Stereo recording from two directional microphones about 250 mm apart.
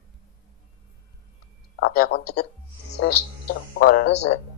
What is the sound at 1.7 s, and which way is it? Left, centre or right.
Speech, left.